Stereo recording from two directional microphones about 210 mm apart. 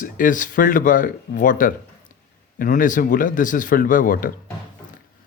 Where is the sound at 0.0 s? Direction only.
40° left (ahead or behind).